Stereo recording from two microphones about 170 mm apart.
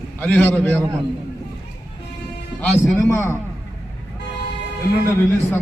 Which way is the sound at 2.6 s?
15° left (ahead or behind).